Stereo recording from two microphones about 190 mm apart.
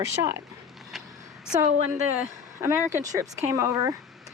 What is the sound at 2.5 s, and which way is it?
Speech, 15° right (ahead or behind).